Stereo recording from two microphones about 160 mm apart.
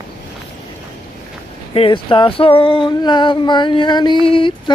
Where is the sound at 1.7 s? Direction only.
35° left (ahead or behind).